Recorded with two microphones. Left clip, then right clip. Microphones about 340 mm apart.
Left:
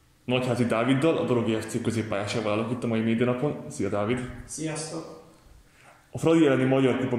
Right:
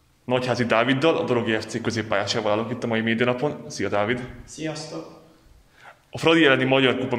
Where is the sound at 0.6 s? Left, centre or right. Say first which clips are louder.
Right 5 dB; right.